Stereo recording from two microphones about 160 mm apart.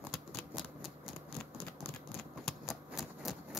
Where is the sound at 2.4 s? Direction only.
5° right (ahead or behind).